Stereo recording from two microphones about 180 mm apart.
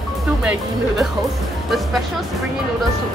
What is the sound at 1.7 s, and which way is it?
Speech, centre (ahead or behind).